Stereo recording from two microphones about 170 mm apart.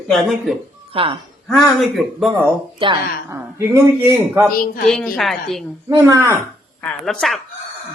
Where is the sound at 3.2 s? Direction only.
15° right (ahead or behind).